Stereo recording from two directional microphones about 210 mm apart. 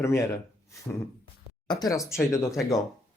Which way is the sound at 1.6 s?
20° left (ahead or behind).